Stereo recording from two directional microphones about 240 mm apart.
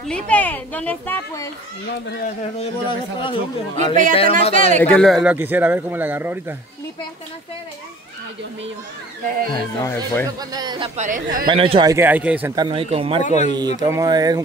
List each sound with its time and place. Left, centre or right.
0.1 s a child's voice: centre
1.9 s speech: left
2.6 s speech: left
3.7 s speech: right
4.4 s speech: left
4.7 s a man's voice: centre
9.5 s a child's voice: centre
10.5 s a man's voice: centre
11.0 s speech: right
11.4 s a man's voice: right
12.6 s speech: right
13.2 s speech: left
13.7 s a man's voice: centre